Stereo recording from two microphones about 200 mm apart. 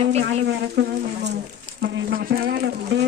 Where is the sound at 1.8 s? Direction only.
55° right (ahead or behind).